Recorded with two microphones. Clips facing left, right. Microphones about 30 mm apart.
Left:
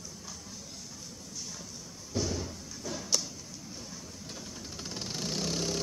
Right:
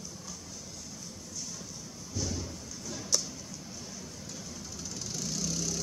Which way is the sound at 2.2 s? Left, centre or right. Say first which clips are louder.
Left 2 dB; centre.